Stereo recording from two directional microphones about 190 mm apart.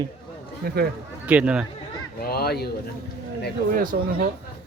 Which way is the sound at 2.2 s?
55° left (ahead or behind).